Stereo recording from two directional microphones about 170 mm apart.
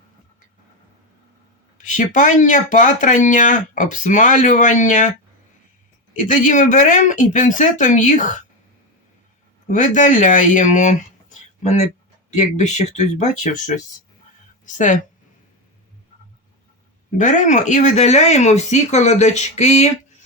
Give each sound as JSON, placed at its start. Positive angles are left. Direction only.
{"t": 1.8, "sound": "speech", "side_deg": 45}
{"t": 6.1, "sound": "speech", "side_deg": 50}
{"t": 9.6, "sound": "a woman's voice", "side_deg": 45}
{"t": 17.2, "sound": "speech", "side_deg": 45}